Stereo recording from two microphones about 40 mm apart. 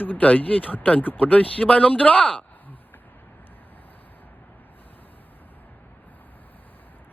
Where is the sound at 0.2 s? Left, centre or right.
Left.